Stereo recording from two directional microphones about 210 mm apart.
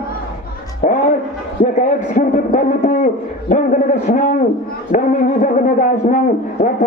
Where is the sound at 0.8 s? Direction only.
35° left (ahead or behind).